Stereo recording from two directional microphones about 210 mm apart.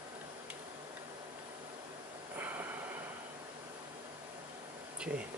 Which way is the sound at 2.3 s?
10° right (ahead or behind).